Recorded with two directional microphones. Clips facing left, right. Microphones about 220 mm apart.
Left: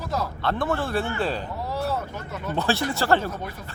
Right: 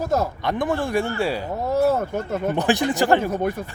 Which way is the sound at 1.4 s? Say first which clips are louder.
Right 7 dB; 50° right (ahead or behind).